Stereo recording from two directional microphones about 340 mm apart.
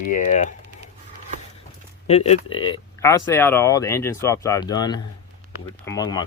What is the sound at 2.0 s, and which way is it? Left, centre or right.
Speech, centre.